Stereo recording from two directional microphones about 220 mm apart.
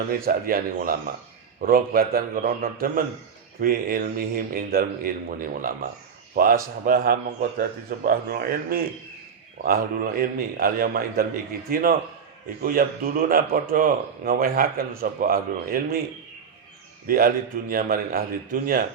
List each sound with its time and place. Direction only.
0.2 s a man's voice: 40° right (ahead or behind)
17.1 s speech: 40° right (ahead or behind)